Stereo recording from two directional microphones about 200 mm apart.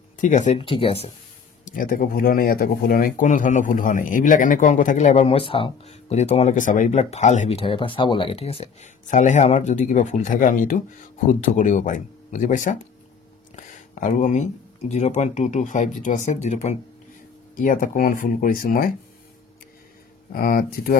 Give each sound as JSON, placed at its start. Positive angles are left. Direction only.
{"t": 0.2, "sound": "speech", "side_deg": 35}
{"t": 1.6, "sound": "speech", "side_deg": 45}
{"t": 20.3, "sound": "speech", "side_deg": 45}